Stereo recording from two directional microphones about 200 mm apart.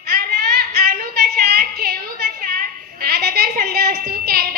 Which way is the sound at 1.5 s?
50° right (ahead or behind).